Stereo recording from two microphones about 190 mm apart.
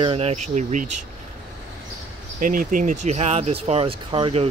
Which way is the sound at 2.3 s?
45° right (ahead or behind).